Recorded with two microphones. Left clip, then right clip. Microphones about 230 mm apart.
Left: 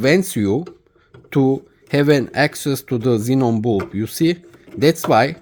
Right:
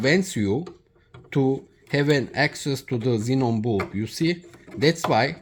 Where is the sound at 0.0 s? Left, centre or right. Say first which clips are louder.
Left 6 dB; left.